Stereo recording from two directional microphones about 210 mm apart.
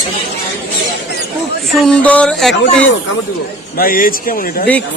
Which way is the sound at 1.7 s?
5° left (ahead or behind).